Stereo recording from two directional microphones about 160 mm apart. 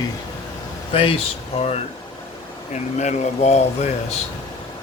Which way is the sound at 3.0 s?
45° left (ahead or behind).